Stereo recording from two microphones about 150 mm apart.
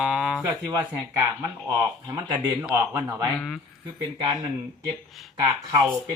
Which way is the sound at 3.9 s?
30° right (ahead or behind).